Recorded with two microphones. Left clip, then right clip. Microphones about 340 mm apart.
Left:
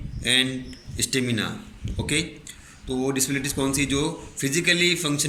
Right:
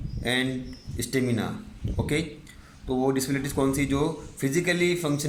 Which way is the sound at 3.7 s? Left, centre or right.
Right.